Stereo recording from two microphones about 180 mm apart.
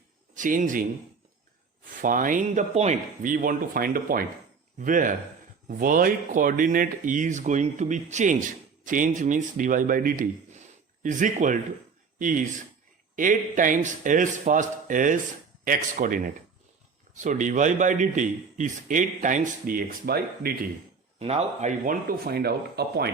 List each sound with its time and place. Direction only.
0.3 s a man's voice: 45° right (ahead or behind)
2.0 s a man's voice: 50° right (ahead or behind)
21.2 s speech: 35° right (ahead or behind); by 23.0 s 60° right (ahead or behind)